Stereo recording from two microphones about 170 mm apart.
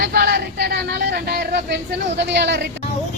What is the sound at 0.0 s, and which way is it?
Speech, 65° right (ahead or behind).